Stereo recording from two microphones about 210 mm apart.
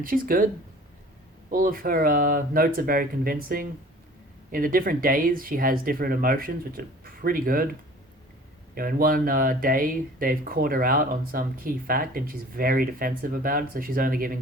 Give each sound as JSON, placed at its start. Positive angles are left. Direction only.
{"t": 0.0, "sound": "speech", "side_deg": -40}